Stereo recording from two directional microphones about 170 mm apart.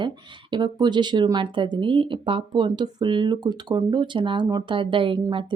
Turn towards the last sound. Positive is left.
turn(degrees=-30)  # may be behind; listen again after turning